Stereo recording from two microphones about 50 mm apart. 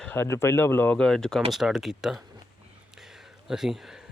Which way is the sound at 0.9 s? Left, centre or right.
Centre.